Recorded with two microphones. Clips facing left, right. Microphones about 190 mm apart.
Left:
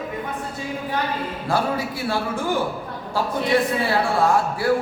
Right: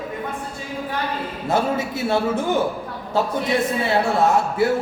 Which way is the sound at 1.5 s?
20° right (ahead or behind).